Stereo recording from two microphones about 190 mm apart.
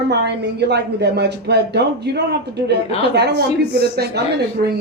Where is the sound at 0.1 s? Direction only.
60° right (ahead or behind).